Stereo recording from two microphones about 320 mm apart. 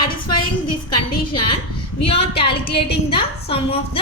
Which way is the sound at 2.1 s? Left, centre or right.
Centre.